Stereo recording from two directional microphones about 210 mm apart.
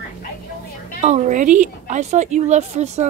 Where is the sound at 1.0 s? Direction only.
35° right (ahead or behind).